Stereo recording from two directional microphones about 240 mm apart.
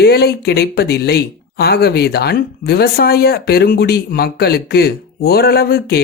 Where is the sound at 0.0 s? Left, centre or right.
Left.